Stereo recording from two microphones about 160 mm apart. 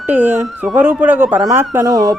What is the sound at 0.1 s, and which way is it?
A man's voice, 10° right (ahead or behind).